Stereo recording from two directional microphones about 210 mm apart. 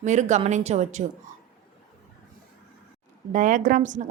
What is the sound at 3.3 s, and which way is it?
Speech, 35° right (ahead or behind).